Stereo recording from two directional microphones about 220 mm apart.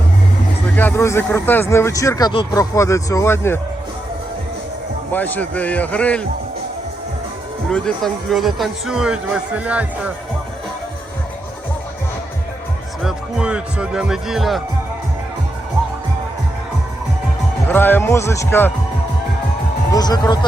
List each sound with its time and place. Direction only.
0.8 s a man's voice: 10° left (ahead or behind)
5.1 s a man's voice: 10° left (ahead or behind)
7.7 s speech: centre (ahead or behind)
13.0 s speech: 5° right (ahead or behind)
17.7 s a man's voice: 10° left (ahead or behind)
19.9 s a man's voice: 15° left (ahead or behind)